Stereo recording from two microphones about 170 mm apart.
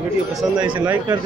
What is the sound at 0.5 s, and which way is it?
Speech, 25° right (ahead or behind).